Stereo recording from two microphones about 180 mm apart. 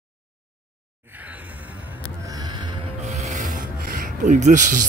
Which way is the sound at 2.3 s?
25° right (ahead or behind).